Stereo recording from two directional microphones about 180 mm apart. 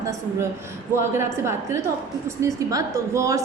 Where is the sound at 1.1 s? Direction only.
15° right (ahead or behind).